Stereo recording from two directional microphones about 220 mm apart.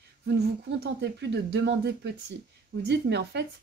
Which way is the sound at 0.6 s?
50° right (ahead or behind).